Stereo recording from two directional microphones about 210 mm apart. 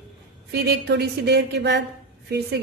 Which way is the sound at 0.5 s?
55° right (ahead or behind).